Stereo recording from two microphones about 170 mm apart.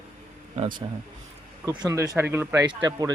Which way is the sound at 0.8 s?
25° right (ahead or behind).